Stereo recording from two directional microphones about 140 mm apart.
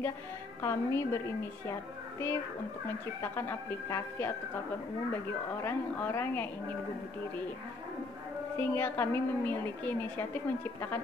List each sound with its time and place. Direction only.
0.6 s a woman's voice: 20° left (ahead or behind)
5.6 s a woman's voice: 20° left (ahead or behind)
8.5 s a woman's voice: 15° left (ahead or behind)